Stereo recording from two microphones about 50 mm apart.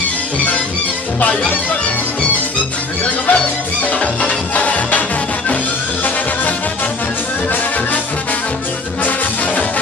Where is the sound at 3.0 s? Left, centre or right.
Left.